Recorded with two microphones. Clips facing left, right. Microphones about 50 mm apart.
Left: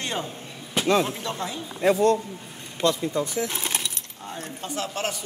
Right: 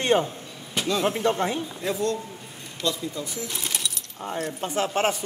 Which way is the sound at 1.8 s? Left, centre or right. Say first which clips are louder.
Left 10 dB; left.